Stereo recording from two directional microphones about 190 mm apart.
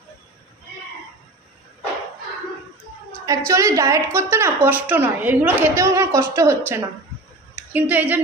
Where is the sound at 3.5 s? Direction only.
15° right (ahead or behind).